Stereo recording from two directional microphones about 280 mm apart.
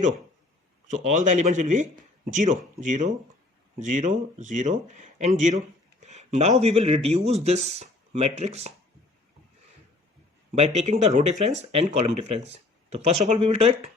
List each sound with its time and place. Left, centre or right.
0.9 s speech: right
10.5 s speech: right